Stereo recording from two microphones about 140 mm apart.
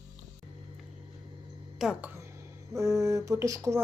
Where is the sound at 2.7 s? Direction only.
20° right (ahead or behind).